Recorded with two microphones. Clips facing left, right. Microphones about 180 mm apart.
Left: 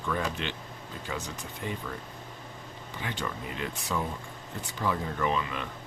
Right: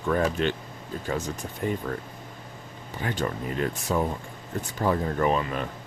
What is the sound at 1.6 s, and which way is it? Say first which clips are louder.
Speech: right 8 dB; 45° right (ahead or behind).